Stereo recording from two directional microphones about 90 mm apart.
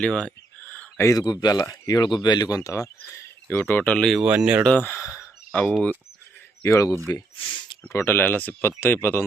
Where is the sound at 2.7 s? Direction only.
35° left (ahead or behind).